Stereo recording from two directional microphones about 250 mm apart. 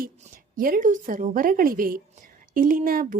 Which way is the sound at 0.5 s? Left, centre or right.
Right.